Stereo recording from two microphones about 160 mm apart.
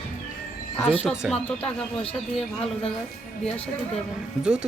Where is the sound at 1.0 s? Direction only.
5° right (ahead or behind).